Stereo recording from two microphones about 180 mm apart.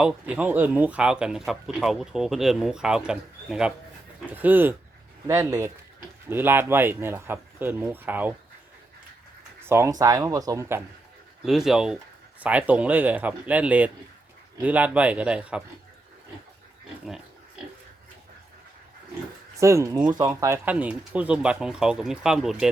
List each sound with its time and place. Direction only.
0.0 s speech: 5° right (ahead or behind)
9.6 s speech: 15° right (ahead or behind)
11.4 s speech: centre (ahead or behind)
19.5 s speech: 15° right (ahead or behind)